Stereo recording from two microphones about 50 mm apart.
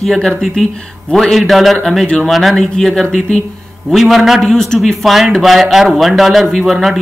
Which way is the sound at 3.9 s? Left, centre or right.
Centre.